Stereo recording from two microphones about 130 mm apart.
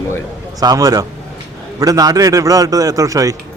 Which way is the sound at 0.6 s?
30° right (ahead or behind).